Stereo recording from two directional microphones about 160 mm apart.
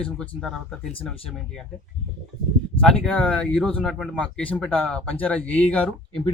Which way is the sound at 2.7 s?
5° left (ahead or behind).